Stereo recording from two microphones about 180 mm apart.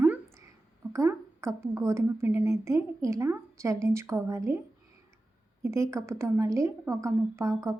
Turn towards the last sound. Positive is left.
turn(degrees=-15)  # may be behind; listen again after turning